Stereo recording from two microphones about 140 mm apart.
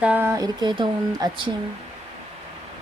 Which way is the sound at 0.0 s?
15° right (ahead or behind).